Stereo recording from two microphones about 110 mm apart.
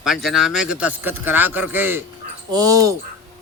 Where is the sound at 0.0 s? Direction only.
Centre (ahead or behind); by 2.0 s 20° right (ahead or behind).